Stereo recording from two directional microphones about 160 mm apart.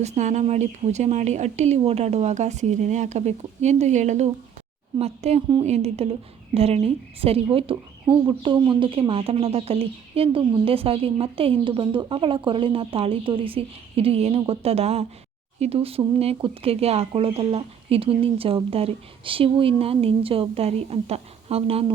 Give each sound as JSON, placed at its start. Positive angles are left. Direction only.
{"t": 0.0, "sound": "speech", "side_deg": -45}